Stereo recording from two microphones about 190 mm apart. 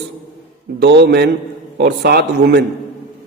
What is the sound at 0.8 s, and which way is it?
A man's voice, 60° right (ahead or behind).